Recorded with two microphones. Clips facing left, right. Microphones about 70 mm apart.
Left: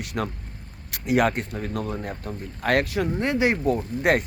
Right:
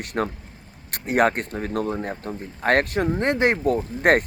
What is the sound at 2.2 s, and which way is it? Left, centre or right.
Speech, right.